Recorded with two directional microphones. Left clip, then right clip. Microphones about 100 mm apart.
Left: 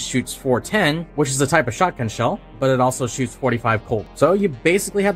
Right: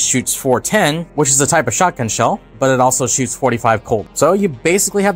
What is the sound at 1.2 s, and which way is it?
Speech, 40° right (ahead or behind).